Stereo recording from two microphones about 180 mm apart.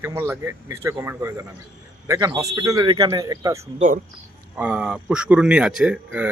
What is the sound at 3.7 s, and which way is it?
Speech, 45° right (ahead or behind).